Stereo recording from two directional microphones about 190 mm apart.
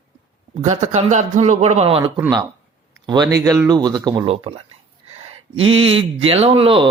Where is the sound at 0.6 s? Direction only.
35° right (ahead or behind).